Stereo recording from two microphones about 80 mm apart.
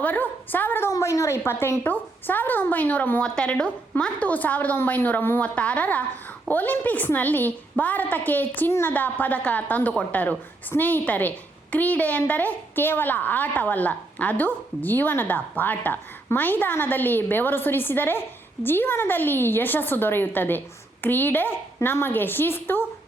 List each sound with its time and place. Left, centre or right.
0.0 s a woman's voice: left
0.9 s a woman's voice: left
3.2 s a woman's voice: centre; by 22.9 s left